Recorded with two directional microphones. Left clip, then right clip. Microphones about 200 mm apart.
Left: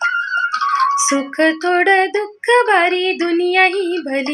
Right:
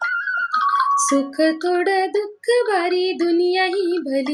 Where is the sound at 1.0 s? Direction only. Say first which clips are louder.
Left 2 dB; 20° left (ahead or behind).